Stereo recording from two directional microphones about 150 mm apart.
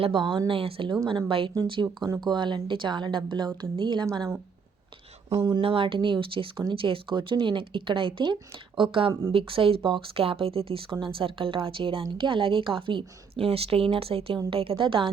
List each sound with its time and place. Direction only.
0.0 s speech: 30° right (ahead or behind)
5.3 s speech: 30° right (ahead or behind)